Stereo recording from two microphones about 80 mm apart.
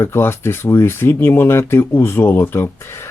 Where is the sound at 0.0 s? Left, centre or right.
Left.